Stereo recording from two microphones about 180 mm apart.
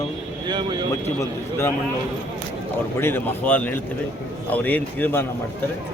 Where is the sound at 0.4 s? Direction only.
25° right (ahead or behind).